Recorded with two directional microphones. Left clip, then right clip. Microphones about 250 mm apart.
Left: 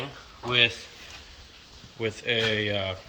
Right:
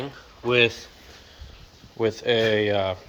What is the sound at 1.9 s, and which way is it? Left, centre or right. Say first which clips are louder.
Speech: right 5 dB; right.